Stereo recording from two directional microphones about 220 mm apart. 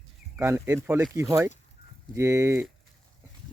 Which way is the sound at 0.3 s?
10° right (ahead or behind).